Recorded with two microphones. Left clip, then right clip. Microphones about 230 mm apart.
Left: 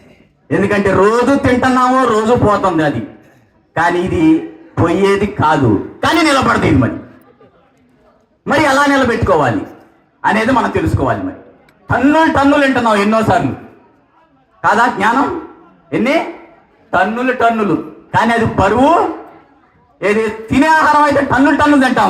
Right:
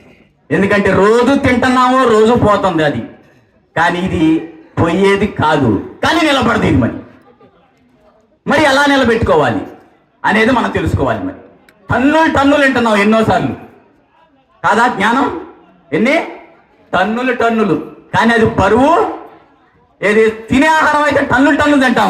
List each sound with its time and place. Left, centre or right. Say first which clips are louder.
0.4 s a man's voice: right 1 dB; right
8.4 s a man's voice: right 1 dB; right
14.6 s a man's voice: even; right
16.9 s a man's voice: even; right